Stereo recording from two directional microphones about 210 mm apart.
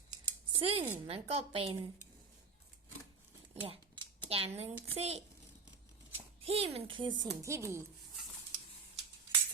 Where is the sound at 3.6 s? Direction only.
25° right (ahead or behind).